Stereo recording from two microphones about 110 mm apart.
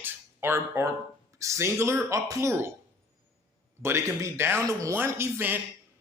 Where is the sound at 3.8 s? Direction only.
25° right (ahead or behind).